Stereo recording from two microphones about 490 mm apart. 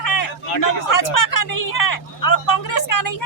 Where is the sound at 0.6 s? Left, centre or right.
Left.